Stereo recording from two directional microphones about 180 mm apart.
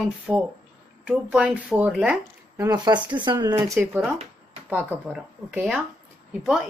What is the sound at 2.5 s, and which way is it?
Speech, 20° right (ahead or behind).